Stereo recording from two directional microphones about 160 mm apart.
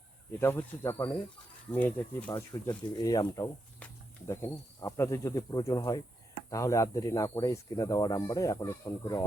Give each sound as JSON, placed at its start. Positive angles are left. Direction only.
{"t": 0.3, "sound": "speech", "side_deg": 15}
{"t": 2.3, "sound": "speech", "side_deg": 25}
{"t": 3.8, "sound": "speech", "side_deg": 10}